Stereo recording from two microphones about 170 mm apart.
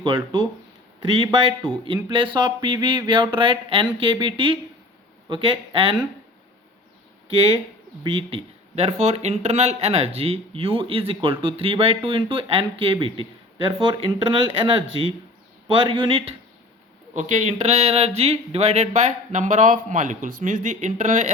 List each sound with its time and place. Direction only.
0.0 s speech: 30° right (ahead or behind)
7.3 s speech: 30° right (ahead or behind)
17.2 s speech: 45° right (ahead or behind)